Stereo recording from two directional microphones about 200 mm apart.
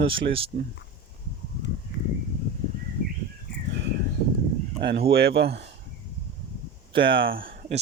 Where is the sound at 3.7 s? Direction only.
60° right (ahead or behind).